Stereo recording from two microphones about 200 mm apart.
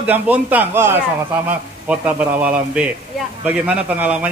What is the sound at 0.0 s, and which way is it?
A man's voice, 10° right (ahead or behind).